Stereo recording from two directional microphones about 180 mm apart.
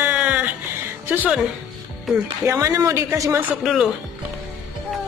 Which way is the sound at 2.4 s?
20° right (ahead or behind).